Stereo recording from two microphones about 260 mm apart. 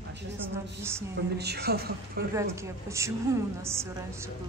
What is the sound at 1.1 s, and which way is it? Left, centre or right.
A woman's voice, right.